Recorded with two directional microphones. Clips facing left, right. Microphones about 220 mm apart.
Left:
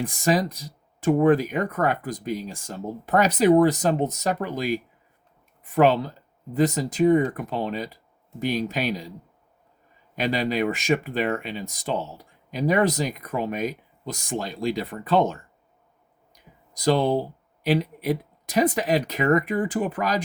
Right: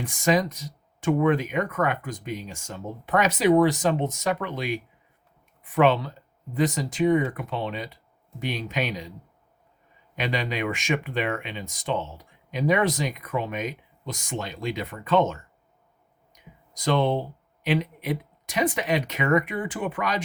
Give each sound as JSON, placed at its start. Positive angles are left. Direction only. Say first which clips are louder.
{"t": 0.3, "sound": "speech", "louder": "even", "side_deg": 40}
{"t": 10.2, "sound": "speech", "louder": "left 4 dB", "side_deg": 40}
{"t": 16.7, "sound": "speech", "louder": "left 2 dB", "side_deg": 40}